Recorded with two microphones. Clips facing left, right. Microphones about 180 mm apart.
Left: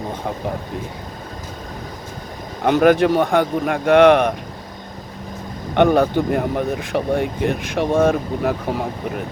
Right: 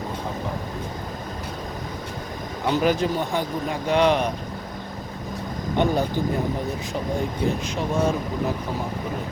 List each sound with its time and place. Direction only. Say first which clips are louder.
2.6 s speech: left 8 dB; 60° left (ahead or behind)
5.7 s speech: left 8 dB; 65° left (ahead or behind)